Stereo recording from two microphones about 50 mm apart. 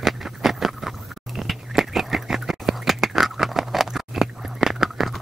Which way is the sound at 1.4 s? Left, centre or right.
Centre.